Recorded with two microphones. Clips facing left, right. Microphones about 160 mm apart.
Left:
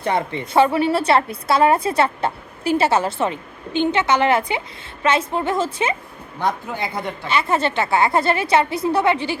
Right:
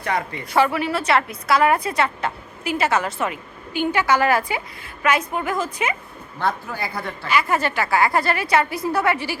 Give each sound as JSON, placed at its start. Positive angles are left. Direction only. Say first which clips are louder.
{"t": 0.0, "sound": "a woman's voice", "louder": "left 3 dB", "side_deg": 30}